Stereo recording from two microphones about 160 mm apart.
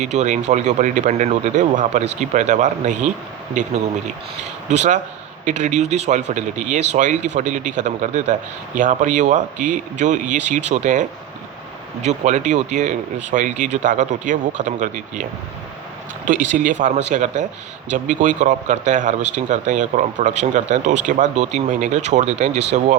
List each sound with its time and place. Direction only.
0.0 s speech: 50° right (ahead or behind)
12.0 s speech: 50° right (ahead or behind)